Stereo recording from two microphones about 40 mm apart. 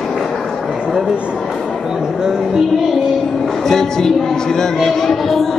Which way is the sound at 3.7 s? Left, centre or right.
Centre.